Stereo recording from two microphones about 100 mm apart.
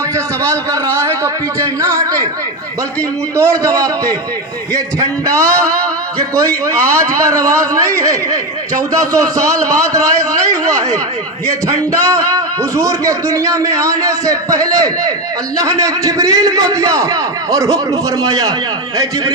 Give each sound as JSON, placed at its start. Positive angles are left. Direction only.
{"t": 3.3, "sound": "a man's voice", "side_deg": -30}